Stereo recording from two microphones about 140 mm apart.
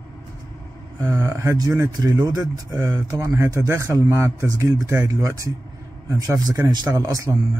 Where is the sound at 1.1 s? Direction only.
25° right (ahead or behind).